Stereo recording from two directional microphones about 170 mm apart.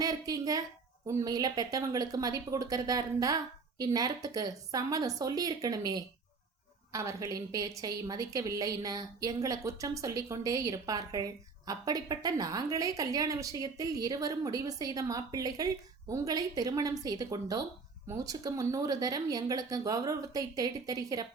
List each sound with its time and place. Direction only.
0.0 s a woman's voice: 20° right (ahead or behind)